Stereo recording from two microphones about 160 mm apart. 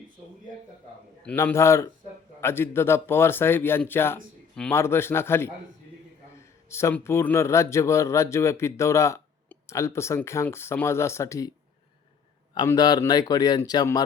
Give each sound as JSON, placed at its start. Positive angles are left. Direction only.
{"t": 1.4, "sound": "a man's voice", "side_deg": 15}
{"t": 6.7, "sound": "a man's voice", "side_deg": 15}
{"t": 12.6, "sound": "speech", "side_deg": 25}